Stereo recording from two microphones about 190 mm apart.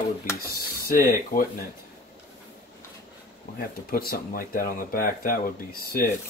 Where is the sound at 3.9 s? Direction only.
50° left (ahead or behind).